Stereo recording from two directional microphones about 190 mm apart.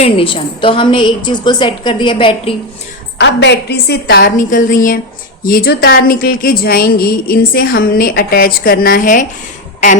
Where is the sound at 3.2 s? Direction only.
65° left (ahead or behind).